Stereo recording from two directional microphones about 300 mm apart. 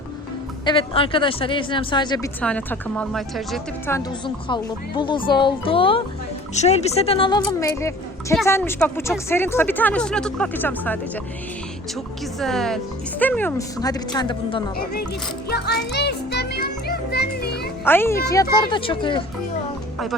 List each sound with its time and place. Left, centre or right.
0.6 s speech: centre
4.4 s speech: centre
12.4 s speech: centre
15.4 s music: left
17.8 s speech: centre